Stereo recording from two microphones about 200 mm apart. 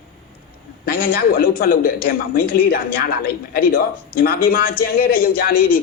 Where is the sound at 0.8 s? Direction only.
45° left (ahead or behind).